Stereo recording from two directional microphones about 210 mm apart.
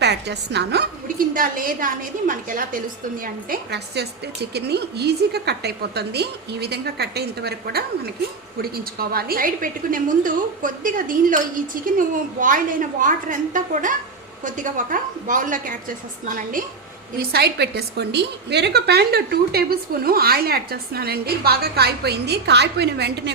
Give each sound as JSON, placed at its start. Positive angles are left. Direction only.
{"t": 0.0, "sound": "a woman's voice", "side_deg": -55}